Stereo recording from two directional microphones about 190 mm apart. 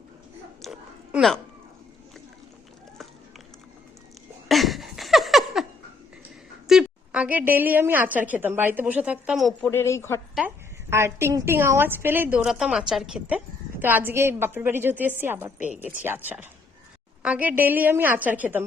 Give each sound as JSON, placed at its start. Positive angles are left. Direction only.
{"t": 0.6, "sound": "chewing", "side_deg": 0}
{"t": 4.4, "sound": "a sound", "side_deg": 0}
{"t": 6.7, "sound": "a woman's voice", "side_deg": -5}
{"t": 9.6, "sound": "a woman's voice", "side_deg": 15}
{"t": 10.3, "sound": "a woman's voice", "side_deg": -10}